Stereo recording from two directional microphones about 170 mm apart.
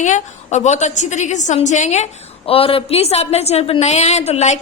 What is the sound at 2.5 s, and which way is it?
A woman's voice, 35° left (ahead or behind).